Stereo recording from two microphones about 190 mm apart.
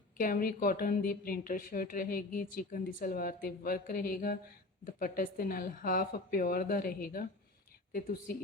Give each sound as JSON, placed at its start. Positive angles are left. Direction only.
{"t": 0.2, "sound": "speech", "side_deg": 50}